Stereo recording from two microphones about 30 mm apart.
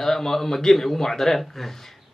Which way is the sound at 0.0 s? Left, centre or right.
Centre.